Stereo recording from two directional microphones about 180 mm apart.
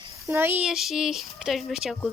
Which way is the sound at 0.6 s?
Centre (ahead or behind).